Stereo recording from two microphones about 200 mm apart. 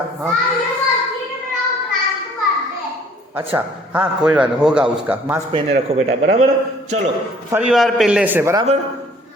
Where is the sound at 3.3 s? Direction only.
10° right (ahead or behind).